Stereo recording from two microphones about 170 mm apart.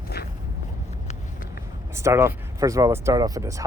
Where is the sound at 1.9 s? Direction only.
15° right (ahead or behind).